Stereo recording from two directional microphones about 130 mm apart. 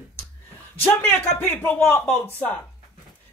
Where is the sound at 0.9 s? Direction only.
20° left (ahead or behind).